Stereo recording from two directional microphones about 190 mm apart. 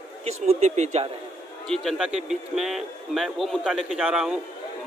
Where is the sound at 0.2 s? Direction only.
35° right (ahead or behind).